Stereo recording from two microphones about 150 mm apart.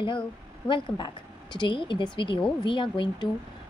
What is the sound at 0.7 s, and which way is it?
A woman's voice, 30° left (ahead or behind).